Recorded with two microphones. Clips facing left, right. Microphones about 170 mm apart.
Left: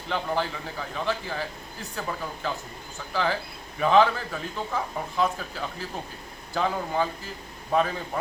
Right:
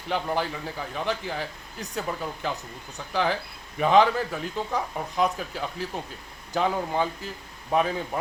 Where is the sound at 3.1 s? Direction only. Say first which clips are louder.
Right 1 dB; 20° right (ahead or behind).